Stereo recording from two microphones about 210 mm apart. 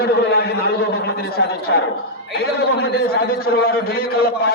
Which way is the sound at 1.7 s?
60° left (ahead or behind).